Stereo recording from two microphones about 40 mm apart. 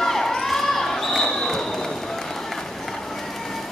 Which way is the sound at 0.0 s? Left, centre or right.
Centre.